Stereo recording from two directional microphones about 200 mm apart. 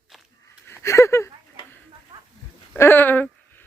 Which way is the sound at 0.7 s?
15° left (ahead or behind).